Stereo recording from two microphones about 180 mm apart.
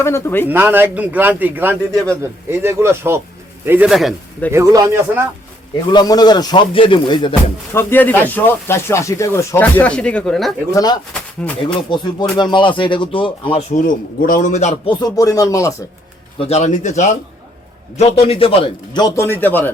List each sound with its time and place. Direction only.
0.0 s speech: 15° left (ahead or behind)
0.4 s a man's voice: 10° right (ahead or behind)
4.5 s a man's voice: 20° right (ahead or behind)
5.9 s speech: 25° left (ahead or behind)
7.7 s speech: 15° left (ahead or behind)
10.8 s speech: 20° left (ahead or behind)
11.1 s speech: 5° left (ahead or behind)
12.4 s speech: 25° left (ahead or behind)
13.7 s a man's voice: 50° left (ahead or behind)
14.8 s speech: 20° left (ahead or behind)
16.4 s speech: 40° left (ahead or behind); by 19.7 s 10° left (ahead or behind)